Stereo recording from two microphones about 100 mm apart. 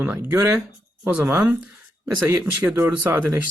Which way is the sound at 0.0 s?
15° right (ahead or behind).